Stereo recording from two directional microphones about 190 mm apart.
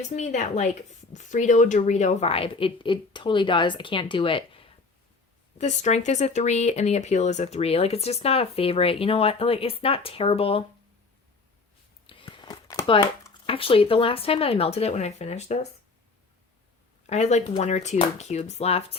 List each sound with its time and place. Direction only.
0.1 s a woman's voice: 40° left (ahead or behind)
5.5 s speech: 40° left (ahead or behind)
12.0 s speech: 25° left (ahead or behind)
17.1 s speech: 35° left (ahead or behind)